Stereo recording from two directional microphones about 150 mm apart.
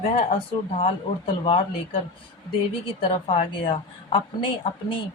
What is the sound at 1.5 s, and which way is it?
Speech, 40° left (ahead or behind).